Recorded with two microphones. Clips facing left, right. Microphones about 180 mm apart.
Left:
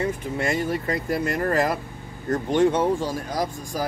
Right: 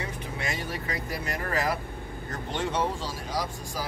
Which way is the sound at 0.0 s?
50° left (ahead or behind).